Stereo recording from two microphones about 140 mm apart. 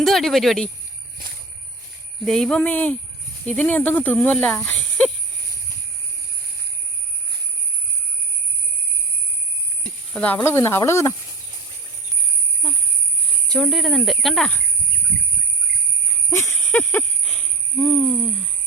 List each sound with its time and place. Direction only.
0.0 s speech: centre (ahead or behind)
2.2 s speech: 5° left (ahead or behind)
10.2 s speech: 10° left (ahead or behind)
13.5 s speech: centre (ahead or behind)
16.3 s speech: 15° left (ahead or behind)
16.6 s a sound: 15° left (ahead or behind)
17.0 s a sound: 5° left (ahead or behind)